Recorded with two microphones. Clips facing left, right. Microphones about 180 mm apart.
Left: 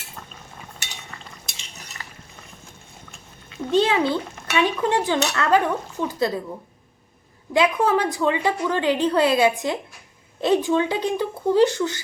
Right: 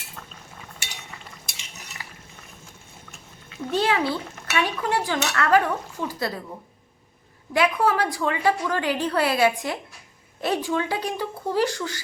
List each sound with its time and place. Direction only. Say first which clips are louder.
2.0 s a sound: left 1 dB; 10° right (ahead or behind)
3.7 s a woman's voice: left 4 dB; 20° left (ahead or behind)
7.5 s a woman's voice: left 2 dB; 20° left (ahead or behind)